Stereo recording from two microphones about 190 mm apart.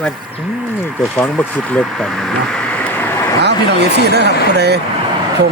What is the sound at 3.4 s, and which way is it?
Speech, 60° right (ahead or behind).